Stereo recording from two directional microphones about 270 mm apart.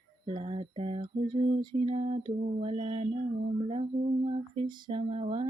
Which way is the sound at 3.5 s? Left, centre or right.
Right.